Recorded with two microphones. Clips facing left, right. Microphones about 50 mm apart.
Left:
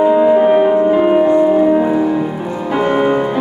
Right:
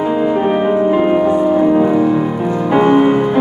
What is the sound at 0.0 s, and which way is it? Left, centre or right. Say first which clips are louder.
Music: left 5 dB; centre.